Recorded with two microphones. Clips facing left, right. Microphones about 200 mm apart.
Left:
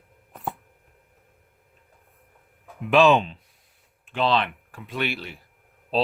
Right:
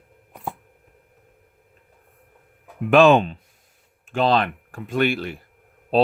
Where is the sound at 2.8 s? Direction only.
50° right (ahead or behind).